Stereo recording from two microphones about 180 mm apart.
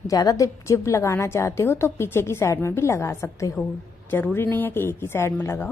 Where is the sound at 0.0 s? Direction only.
20° left (ahead or behind).